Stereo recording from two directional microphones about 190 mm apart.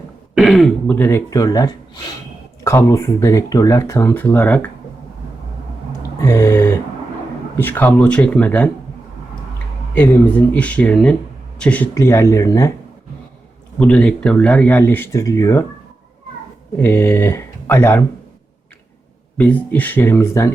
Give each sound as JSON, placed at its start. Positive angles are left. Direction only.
{"t": 0.3, "sound": "speech", "side_deg": 0}
{"t": 6.1, "sound": "a sound", "side_deg": 15}
{"t": 7.5, "sound": "speech", "side_deg": 10}
{"t": 9.9, "sound": "speech", "side_deg": 10}
{"t": 13.7, "sound": "speech", "side_deg": 5}
{"t": 16.7, "sound": "speech", "side_deg": 10}
{"t": 19.4, "sound": "speech", "side_deg": 10}